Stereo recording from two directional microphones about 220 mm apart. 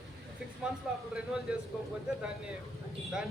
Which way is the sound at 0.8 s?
Centre (ahead or behind).